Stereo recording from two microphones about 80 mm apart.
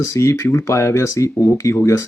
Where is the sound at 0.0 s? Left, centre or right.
Left.